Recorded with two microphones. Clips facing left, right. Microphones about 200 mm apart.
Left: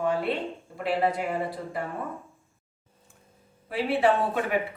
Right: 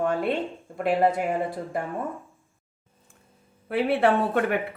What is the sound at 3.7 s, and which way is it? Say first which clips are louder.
Speech: right 2 dB; 55° right (ahead or behind).